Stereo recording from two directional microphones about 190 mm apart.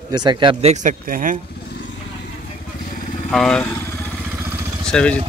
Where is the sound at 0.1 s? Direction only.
20° right (ahead or behind); by 1.4 s 45° right (ahead or behind).